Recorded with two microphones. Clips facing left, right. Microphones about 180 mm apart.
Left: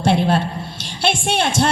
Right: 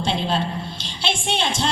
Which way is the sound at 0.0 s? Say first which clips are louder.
Left 6 dB; 60° left (ahead or behind).